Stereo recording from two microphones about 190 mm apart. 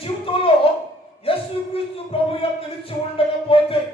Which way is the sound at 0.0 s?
30° left (ahead or behind).